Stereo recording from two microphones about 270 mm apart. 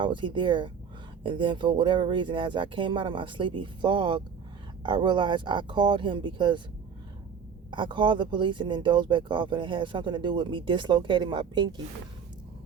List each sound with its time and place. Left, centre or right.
0.0 s speech: centre
7.7 s speech: centre